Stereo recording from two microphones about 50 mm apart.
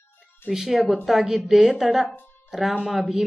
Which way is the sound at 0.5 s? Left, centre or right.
Centre.